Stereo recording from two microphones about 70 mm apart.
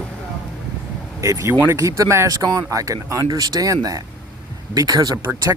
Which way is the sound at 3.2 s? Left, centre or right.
Right.